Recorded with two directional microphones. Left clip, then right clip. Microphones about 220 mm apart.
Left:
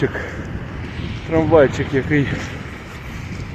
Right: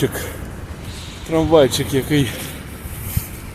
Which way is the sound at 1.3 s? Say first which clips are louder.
Even; 20° right (ahead or behind).